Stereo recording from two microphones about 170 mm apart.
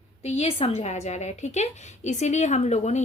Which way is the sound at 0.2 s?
40° left (ahead or behind).